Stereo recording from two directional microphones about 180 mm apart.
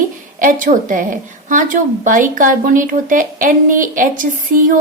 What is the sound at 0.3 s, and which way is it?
Speech, 45° right (ahead or behind).